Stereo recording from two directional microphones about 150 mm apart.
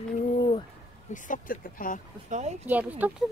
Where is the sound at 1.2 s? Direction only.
65° left (ahead or behind).